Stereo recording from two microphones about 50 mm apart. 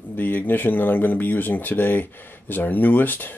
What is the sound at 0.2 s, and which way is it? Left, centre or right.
Speech, left.